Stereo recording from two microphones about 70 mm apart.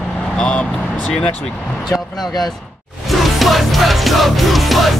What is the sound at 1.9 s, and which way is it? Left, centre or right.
Speech, left.